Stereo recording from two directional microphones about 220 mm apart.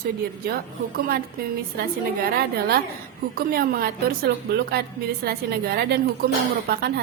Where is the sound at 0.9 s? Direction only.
45° right (ahead or behind).